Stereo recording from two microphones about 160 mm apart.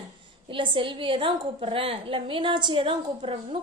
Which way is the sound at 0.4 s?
30° right (ahead or behind).